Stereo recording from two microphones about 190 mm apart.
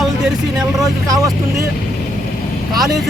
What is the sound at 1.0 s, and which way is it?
Speech, 15° right (ahead or behind).